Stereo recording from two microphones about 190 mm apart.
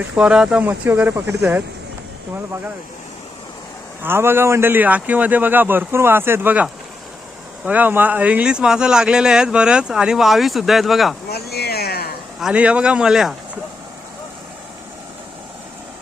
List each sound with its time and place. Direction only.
0.0 s speech: 5° right (ahead or behind)
4.0 s speech: 10° right (ahead or behind)
11.3 s speech: 55° left (ahead or behind)
12.4 s speech: 5° right (ahead or behind)